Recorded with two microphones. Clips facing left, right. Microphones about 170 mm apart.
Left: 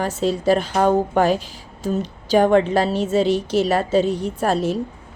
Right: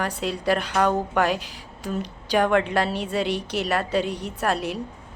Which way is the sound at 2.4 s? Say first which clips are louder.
Left 5 dB; 35° left (ahead or behind).